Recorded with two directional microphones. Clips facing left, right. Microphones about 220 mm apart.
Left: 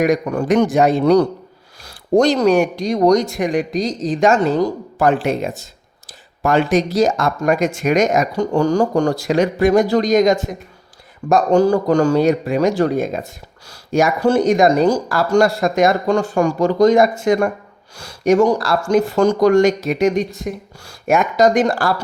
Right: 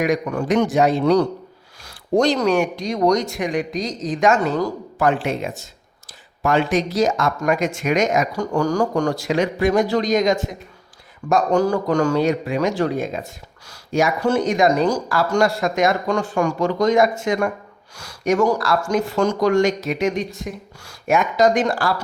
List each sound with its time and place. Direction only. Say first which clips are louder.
0.0 s a man's voice: left 4 dB; 40° left (ahead or behind)
8.3 s speech: left 4 dB; 25° left (ahead or behind); by 10.4 s 40° left (ahead or behind)
11.3 s speech: left 4 dB; 30° left (ahead or behind)